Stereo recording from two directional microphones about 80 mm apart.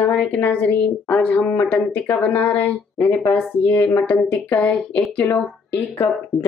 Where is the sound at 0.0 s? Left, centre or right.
Centre.